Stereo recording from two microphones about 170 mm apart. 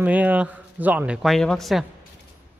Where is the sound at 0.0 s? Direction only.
10° right (ahead or behind).